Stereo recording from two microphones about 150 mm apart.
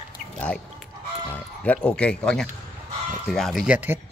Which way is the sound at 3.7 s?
15° right (ahead or behind).